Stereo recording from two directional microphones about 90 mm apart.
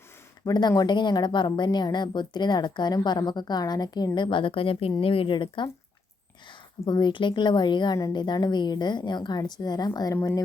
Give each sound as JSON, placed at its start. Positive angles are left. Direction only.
{"t": 0.4, "sound": "a woman's voice", "side_deg": 50}